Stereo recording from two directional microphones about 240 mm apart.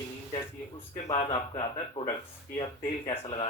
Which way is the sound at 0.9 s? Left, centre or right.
Left.